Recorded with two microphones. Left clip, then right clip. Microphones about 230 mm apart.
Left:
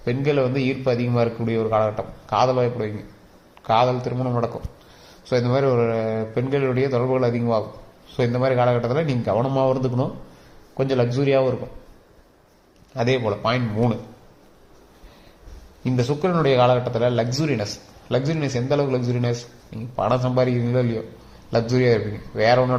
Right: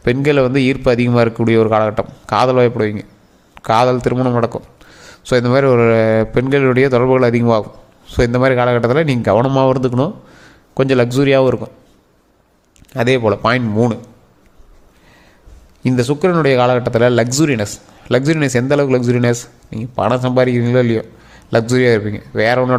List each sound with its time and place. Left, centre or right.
0.0 s a man's voice: right
12.9 s a man's voice: right
15.8 s a man's voice: right